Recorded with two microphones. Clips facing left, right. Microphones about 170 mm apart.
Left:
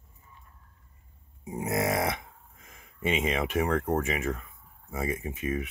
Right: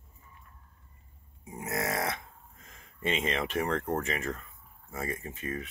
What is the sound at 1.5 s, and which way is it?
Speech, 20° left (ahead or behind).